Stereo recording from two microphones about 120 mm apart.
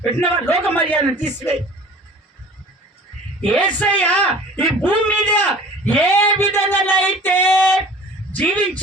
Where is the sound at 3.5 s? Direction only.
10° left (ahead or behind).